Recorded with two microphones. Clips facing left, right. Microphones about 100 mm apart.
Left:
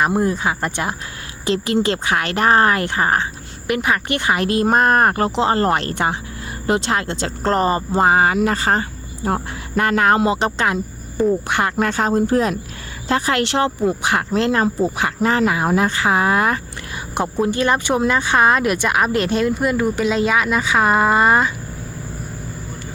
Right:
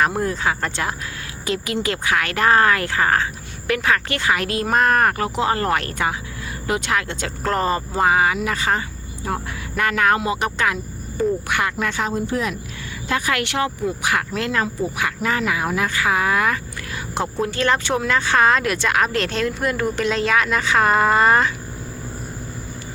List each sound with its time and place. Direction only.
0.0 s speech: 15° left (ahead or behind)
1.5 s speech: 30° left (ahead or behind)
11.8 s speech: 40° left (ahead or behind)
17.2 s speech: 20° left (ahead or behind)